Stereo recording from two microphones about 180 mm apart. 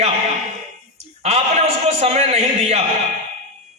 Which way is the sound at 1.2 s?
35° right (ahead or behind).